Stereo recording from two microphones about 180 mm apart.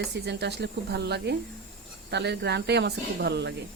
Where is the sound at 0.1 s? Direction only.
70° right (ahead or behind).